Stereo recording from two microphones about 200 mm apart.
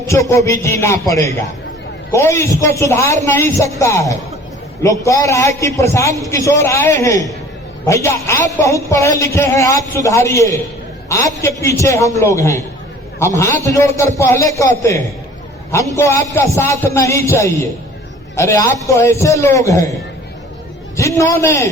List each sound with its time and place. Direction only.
0.1 s a man's voice: 15° left (ahead or behind)
20.9 s a man's voice: 15° left (ahead or behind)